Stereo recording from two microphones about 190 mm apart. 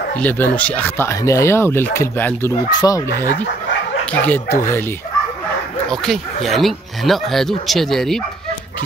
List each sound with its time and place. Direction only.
0.2 s speech: 10° left (ahead or behind)
4.0 s speech: 10° left (ahead or behind)
5.9 s speech: centre (ahead or behind)